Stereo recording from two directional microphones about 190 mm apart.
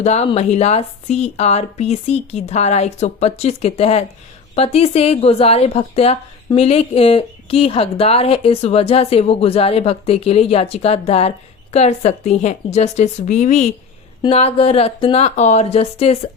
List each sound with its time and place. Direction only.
0.0 s a woman's voice: 35° left (ahead or behind)